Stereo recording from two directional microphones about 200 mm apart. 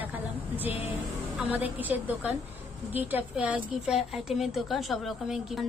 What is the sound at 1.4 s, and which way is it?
A woman's voice, 10° right (ahead or behind).